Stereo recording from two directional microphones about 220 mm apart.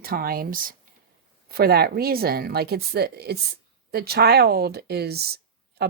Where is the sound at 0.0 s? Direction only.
40° right (ahead or behind).